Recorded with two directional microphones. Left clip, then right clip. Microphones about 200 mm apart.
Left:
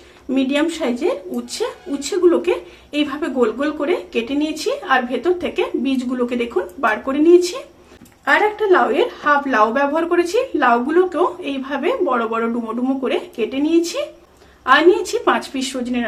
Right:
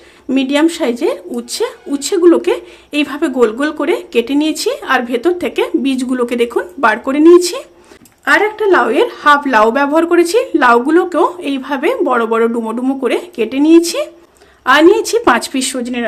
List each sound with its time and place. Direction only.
0.3 s speech: 50° right (ahead or behind)